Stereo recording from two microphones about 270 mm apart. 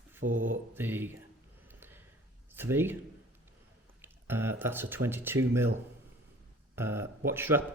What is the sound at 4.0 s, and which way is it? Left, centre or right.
Speech, centre.